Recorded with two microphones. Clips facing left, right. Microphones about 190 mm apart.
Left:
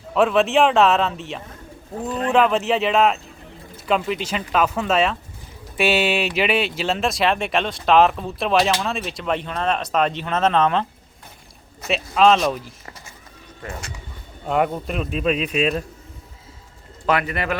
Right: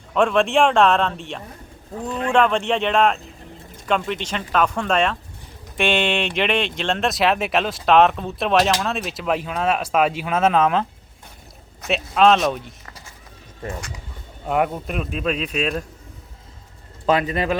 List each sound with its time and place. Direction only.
0.1 s speech: 5° left (ahead or behind)
14.4 s speech: 5° right (ahead or behind)
17.1 s speech: 20° right (ahead or behind)